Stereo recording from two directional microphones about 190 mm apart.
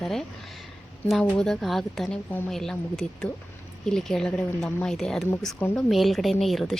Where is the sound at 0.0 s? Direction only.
Centre (ahead or behind).